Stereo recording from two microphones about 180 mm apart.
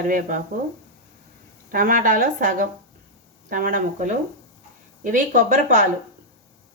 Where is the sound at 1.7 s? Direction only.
50° right (ahead or behind).